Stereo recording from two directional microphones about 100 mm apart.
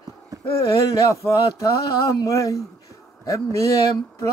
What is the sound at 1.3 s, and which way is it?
Male singing, 35° left (ahead or behind).